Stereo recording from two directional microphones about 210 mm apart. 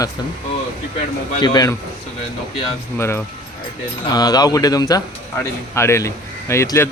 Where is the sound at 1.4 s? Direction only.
20° left (ahead or behind).